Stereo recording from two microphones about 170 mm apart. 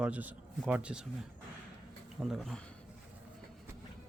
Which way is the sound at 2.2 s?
Centre (ahead or behind).